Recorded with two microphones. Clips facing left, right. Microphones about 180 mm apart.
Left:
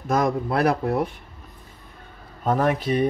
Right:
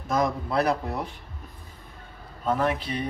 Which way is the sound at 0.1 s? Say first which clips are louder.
Left 3 dB; 55° left (ahead or behind).